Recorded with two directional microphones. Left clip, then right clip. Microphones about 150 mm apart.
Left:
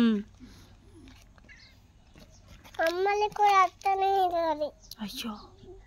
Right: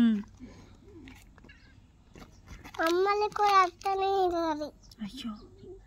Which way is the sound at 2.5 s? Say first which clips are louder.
Right 4 dB; 45° right (ahead or behind).